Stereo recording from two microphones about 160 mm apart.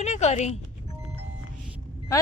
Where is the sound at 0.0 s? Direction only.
45° left (ahead or behind).